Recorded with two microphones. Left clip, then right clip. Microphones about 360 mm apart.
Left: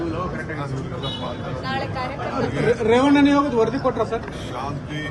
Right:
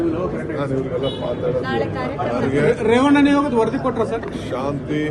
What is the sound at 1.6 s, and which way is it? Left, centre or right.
Mantra, centre.